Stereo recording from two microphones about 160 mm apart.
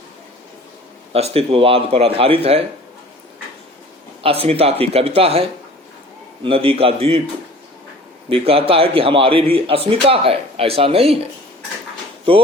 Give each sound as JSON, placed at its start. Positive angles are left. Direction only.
{"t": 1.1, "sound": "speech", "side_deg": -40}
{"t": 4.2, "sound": "speech", "side_deg": -35}
{"t": 8.3, "sound": "speech", "side_deg": -35}